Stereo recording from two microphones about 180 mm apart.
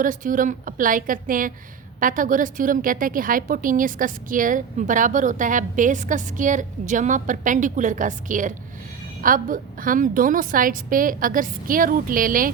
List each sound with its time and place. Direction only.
0.0 s a woman's voice: 50° right (ahead or behind)